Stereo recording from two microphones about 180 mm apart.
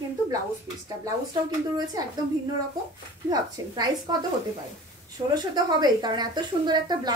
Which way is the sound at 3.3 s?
20° right (ahead or behind).